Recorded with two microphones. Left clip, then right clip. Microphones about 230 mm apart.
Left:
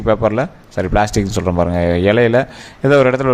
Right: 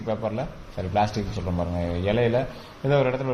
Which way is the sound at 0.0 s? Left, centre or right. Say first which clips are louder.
Left 13 dB; left.